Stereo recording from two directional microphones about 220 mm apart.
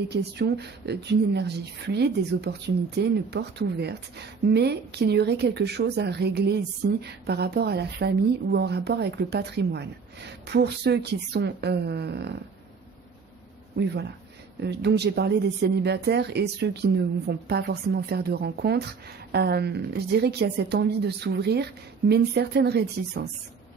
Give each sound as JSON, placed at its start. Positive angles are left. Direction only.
{"t": 0.1, "sound": "speech", "side_deg": -50}
{"t": 13.7, "sound": "speech", "side_deg": -50}